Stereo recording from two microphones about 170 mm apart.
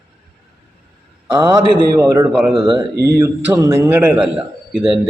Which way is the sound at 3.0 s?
20° right (ahead or behind).